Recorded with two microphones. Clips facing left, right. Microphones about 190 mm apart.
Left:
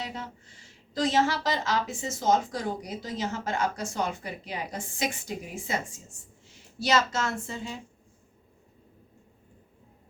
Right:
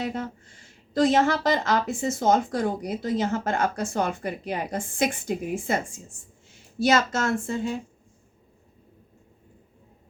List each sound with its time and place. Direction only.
0.0 s a woman's voice: 50° right (ahead or behind)